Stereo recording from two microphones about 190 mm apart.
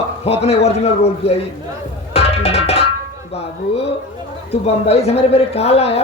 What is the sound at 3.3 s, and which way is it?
A man's voice, 30° left (ahead or behind).